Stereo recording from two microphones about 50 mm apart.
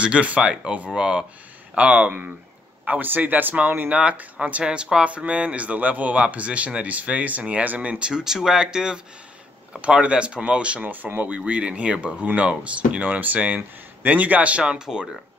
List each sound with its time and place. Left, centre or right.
0.0 s speech: right
1.8 s a man's voice: right
3.9 s speech: right
8.1 s speech: centre
10.8 s a man's voice: right
11.3 s speech: right